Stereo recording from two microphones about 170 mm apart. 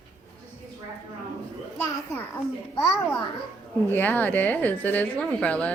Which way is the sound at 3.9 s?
10° left (ahead or behind).